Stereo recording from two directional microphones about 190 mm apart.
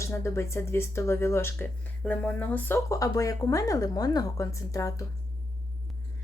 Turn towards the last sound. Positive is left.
turn(degrees=15)  # may be behind; listen again after turning